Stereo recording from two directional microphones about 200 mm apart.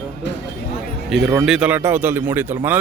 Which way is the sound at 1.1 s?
Centre (ahead or behind).